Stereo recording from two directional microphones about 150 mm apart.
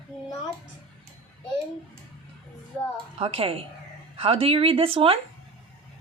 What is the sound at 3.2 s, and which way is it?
Speech, 40° right (ahead or behind).